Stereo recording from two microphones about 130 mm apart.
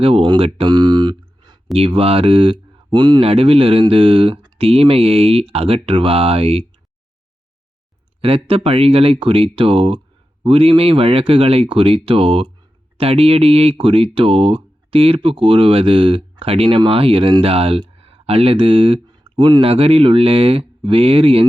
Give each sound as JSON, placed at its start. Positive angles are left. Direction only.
{"t": 0.0, "sound": "speech", "side_deg": -45}
{"t": 1.7, "sound": "speech", "side_deg": -45}
{"t": 8.4, "sound": "speech", "side_deg": -50}
{"t": 19.2, "sound": "speech", "side_deg": -35}
{"t": 19.7, "sound": "speech", "side_deg": -50}